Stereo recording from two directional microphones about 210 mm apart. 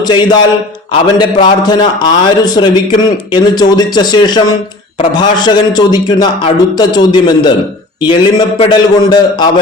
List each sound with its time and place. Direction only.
0.0 s a man's voice: 20° left (ahead or behind)